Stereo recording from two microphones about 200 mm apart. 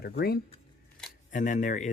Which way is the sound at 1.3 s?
40° left (ahead or behind).